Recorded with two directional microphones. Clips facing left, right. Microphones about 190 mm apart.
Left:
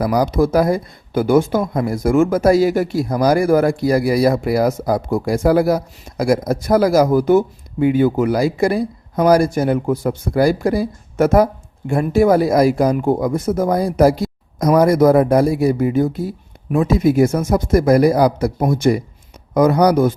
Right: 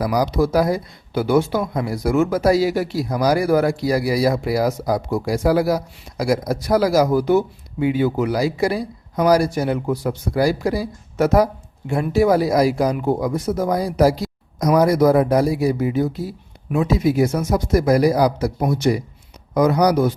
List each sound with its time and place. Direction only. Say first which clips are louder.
0.0 s speech: left 3 dB; 55° left (ahead or behind)